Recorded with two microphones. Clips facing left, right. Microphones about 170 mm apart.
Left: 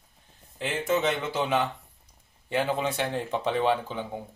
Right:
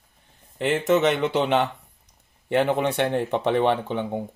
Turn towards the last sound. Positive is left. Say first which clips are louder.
# right 7 dB
turn(degrees=-60)  # may be behind; listen again after turning